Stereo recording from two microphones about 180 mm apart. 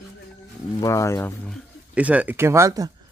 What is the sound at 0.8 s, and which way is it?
Speech, 15° left (ahead or behind).